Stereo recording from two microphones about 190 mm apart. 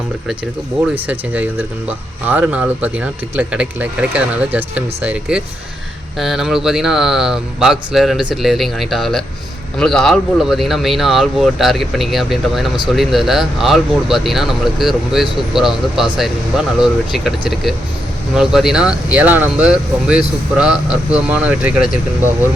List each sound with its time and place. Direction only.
0.9 s speech: 10° right (ahead or behind)